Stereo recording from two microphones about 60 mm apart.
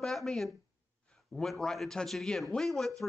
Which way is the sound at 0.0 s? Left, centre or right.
Centre.